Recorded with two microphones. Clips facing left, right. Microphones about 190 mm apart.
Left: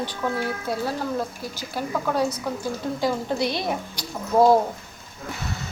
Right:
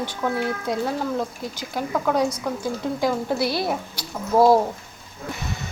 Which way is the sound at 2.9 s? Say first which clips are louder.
Right 1 dB; 10° right (ahead or behind).